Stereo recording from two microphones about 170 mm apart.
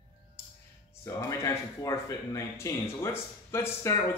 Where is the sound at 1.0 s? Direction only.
15° left (ahead or behind).